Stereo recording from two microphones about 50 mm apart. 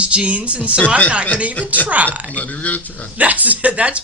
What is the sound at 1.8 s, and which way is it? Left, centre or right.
Speech, right.